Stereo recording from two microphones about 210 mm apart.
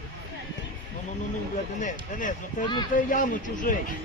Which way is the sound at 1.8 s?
40° left (ahead or behind).